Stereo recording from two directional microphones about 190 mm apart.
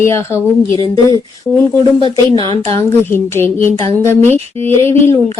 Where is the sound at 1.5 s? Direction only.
Centre (ahead or behind).